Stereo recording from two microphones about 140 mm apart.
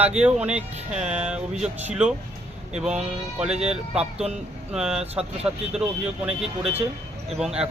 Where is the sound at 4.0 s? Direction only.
50° right (ahead or behind).